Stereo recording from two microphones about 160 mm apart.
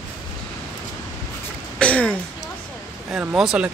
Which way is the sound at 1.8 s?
5° left (ahead or behind).